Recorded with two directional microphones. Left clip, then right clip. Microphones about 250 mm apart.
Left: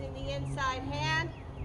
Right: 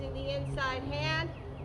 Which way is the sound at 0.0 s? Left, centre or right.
Centre.